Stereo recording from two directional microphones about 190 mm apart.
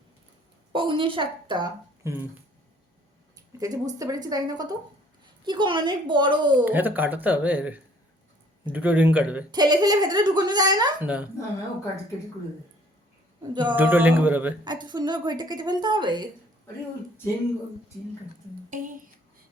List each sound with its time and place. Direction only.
0.7 s a woman's voice: 25° right (ahead or behind)
3.3 s a woman's voice: 20° right (ahead or behind)
6.7 s speech: 10° right (ahead or behind)
9.5 s a woman's voice: 20° right (ahead or behind)
11.0 s speech: 10° right (ahead or behind)
13.5 s a woman's voice: 25° right (ahead or behind)
13.7 s speech: 10° right (ahead or behind)
14.6 s a woman's voice: 25° right (ahead or behind)
18.7 s speech: 40° right (ahead or behind)